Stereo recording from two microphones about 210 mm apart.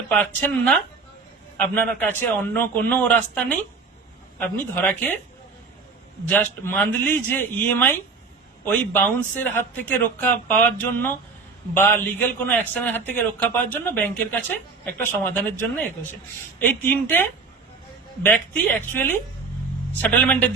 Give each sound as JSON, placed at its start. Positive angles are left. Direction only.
{"t": 0.1, "sound": "a man's voice", "side_deg": 5}
{"t": 4.4, "sound": "speech", "side_deg": 5}
{"t": 6.2, "sound": "speech", "side_deg": 10}